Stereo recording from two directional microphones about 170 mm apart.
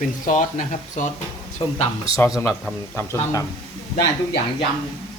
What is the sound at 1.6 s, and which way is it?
Speech, 35° left (ahead or behind).